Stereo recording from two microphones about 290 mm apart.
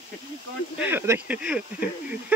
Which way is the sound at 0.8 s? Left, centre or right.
Centre.